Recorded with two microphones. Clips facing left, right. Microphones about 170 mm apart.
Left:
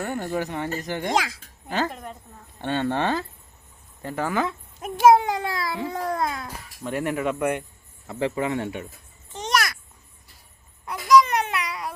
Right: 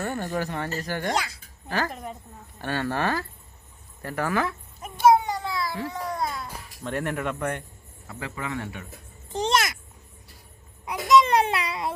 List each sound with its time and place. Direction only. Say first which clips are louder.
0.0 s speech: left 1 dB; 15° left (ahead or behind)
1.1 s speech: left 7 dB; 90° left
1.6 s speech: left 2 dB; 20° left (ahead or behind)
1.9 s a woman's voice: right 1 dB; centre (ahead or behind)
2.6 s speech: left 3 dB; 20° left (ahead or behind)
4.9 s a sound: left 3 dB; 85° left
5.9 s babbling: left 3 dB; 55° left (ahead or behind)
6.8 s speech: left 3 dB; 10° left (ahead or behind)
8.0 s speech: left 9 dB; 25° left (ahead or behind)
9.3 s a sound: right 1 dB; 30° right (ahead or behind)
10.8 s babbling: left 1 dB; 20° right (ahead or behind)